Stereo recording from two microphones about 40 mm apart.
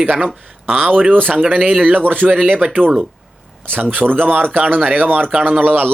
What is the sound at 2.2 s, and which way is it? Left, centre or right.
Speech, right.